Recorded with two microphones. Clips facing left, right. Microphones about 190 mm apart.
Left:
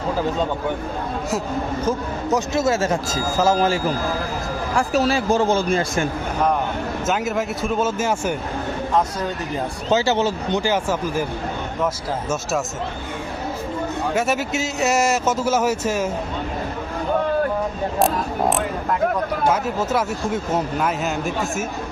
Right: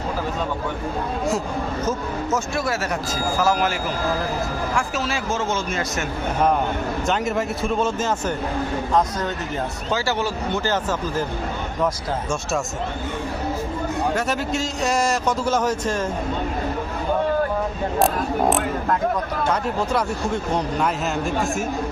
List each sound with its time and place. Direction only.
1.9 s speech: 20° left (ahead or behind)
7.1 s a man's voice: centre (ahead or behind)
9.9 s speech: 25° left (ahead or behind)
14.2 s a man's voice: 5° left (ahead or behind)
18.0 s a man's voice: centre (ahead or behind)